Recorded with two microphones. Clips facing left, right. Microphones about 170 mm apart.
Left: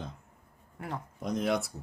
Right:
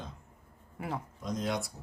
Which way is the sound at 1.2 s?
60° left (ahead or behind).